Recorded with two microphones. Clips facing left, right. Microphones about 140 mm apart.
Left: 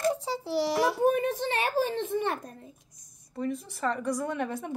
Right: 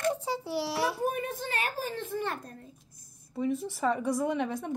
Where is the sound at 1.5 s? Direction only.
25° left (ahead or behind).